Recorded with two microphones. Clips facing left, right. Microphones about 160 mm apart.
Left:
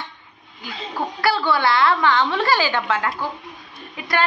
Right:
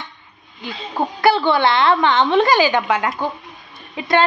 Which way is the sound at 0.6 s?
20° right (ahead or behind).